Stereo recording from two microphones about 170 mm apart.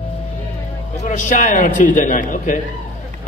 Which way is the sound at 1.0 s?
45° left (ahead or behind).